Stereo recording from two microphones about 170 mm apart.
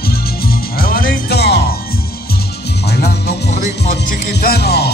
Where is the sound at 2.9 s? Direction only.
70° left (ahead or behind).